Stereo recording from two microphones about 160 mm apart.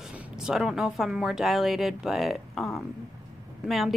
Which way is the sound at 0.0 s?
5° right (ahead or behind).